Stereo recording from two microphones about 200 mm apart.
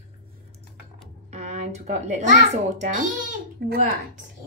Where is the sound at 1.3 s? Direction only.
35° right (ahead or behind).